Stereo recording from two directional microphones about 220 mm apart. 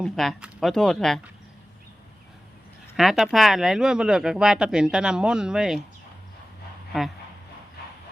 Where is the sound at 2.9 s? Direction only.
Centre (ahead or behind).